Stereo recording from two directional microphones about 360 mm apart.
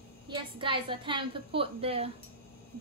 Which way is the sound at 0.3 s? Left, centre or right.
Centre.